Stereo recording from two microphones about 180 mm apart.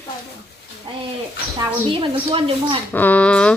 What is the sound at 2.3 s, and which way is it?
Speech, 30° right (ahead or behind).